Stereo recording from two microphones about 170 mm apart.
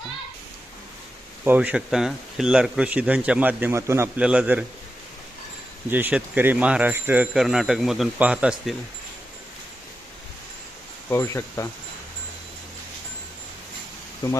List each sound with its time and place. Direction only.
1.5 s speech: 10° right (ahead or behind)
5.9 s speech: 10° right (ahead or behind)
11.1 s speech: 15° left (ahead or behind)